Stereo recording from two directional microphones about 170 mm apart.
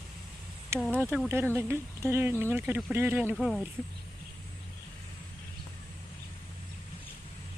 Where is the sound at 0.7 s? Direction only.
15° right (ahead or behind).